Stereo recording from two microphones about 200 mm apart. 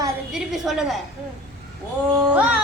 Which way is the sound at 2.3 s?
5° right (ahead or behind).